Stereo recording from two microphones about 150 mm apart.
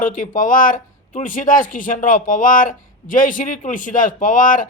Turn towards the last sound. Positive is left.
turn(degrees=65)  # may be behind; listen again after turning